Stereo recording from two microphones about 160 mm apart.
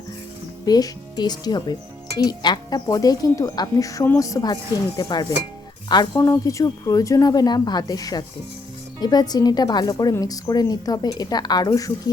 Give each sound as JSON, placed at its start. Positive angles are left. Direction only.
{"t": 0.6, "sound": "a woman's voice", "side_deg": 25}